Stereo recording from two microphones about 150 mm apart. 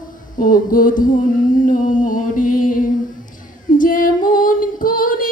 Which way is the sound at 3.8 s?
65° left (ahead or behind).